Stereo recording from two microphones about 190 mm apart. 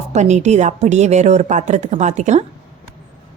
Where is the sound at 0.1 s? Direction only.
40° right (ahead or behind).